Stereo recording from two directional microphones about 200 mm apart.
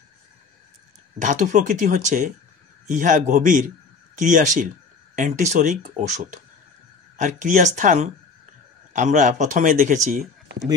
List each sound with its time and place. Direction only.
1.2 s a man's voice: 40° right (ahead or behind)